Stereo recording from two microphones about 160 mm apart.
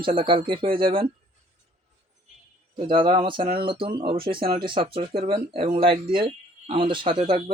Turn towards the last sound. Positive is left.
turn(degrees=-30)  # may be behind; listen again after turning